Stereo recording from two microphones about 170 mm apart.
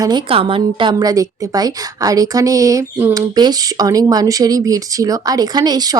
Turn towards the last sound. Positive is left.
turn(degrees=-25)  # may be behind; listen again after turning